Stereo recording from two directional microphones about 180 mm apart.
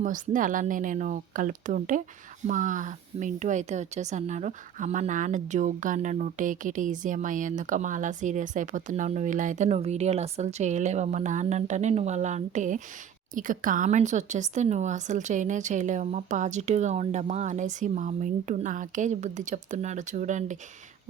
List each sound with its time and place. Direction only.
0.0 s speech: 45° right (ahead or behind)